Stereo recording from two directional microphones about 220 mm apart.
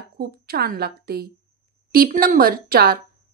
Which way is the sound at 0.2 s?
45° right (ahead or behind).